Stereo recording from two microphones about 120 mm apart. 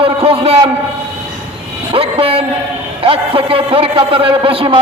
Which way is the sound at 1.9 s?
50° right (ahead or behind).